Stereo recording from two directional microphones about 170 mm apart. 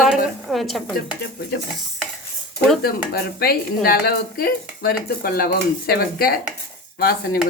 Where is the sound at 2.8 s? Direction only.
60° left (ahead or behind).